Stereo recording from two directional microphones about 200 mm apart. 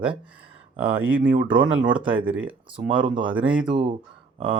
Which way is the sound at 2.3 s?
5° right (ahead or behind).